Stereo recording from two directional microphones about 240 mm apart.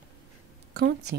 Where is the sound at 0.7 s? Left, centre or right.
Right.